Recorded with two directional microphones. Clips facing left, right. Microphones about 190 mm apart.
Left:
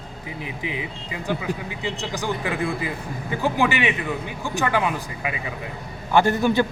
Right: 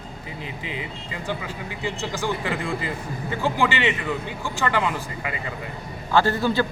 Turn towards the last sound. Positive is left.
turn(degrees=20)  # may be behind; listen again after turning